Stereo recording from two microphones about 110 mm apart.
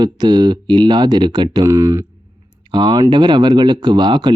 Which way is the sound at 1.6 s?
25° right (ahead or behind).